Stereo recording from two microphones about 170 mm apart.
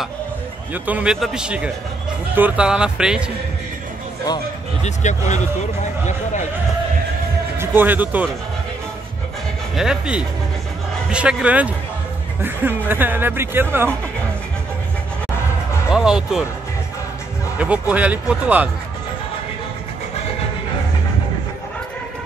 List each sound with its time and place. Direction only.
0.8 s speech: 5° right (ahead or behind)
4.8 s speech: 45° left (ahead or behind)
7.5 s speech: 15° right (ahead or behind)
9.8 s speech: 5° right (ahead or behind)
15.9 s speech: 5° right (ahead or behind)
17.6 s speech: 5° right (ahead or behind)